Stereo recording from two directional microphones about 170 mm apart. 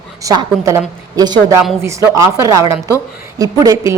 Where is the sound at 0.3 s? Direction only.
20° right (ahead or behind).